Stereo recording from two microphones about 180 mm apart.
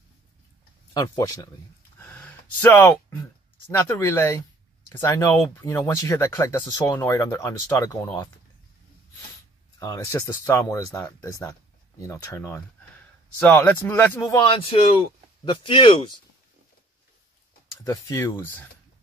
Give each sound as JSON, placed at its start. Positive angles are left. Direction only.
{"t": 0.9, "sound": "speech", "side_deg": 20}
{"t": 2.0, "sound": "a sound", "side_deg": 10}
{"t": 3.7, "sound": "speech", "side_deg": 15}
{"t": 9.8, "sound": "speech", "side_deg": 15}
{"t": 14.6, "sound": "speech", "side_deg": 30}
{"t": 17.8, "sound": "speech", "side_deg": 15}